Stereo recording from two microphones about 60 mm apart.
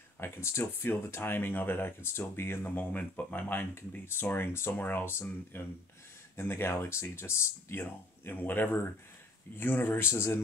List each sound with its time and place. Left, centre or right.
0.2 s speech: left
2.6 s speech: left
4.0 s speech: left
4.7 s speech: left
7.8 s speech: left